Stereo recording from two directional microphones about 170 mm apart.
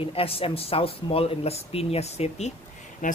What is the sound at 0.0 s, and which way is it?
Speech, 35° left (ahead or behind).